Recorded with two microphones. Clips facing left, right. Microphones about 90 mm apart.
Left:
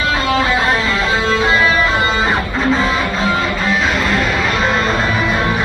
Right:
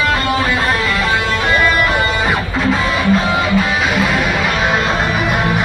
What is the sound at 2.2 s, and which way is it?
Music, 5° right (ahead or behind).